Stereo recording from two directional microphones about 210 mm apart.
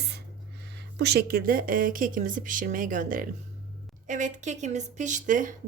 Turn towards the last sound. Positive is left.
turn(degrees=-40)  # may be behind; listen again after turning